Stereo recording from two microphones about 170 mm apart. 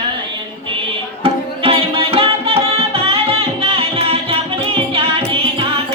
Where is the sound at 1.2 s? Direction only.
35° right (ahead or behind).